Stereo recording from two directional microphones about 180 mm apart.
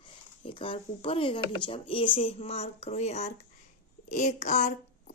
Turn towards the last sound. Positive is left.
turn(degrees=40)  # may be behind; listen again after turning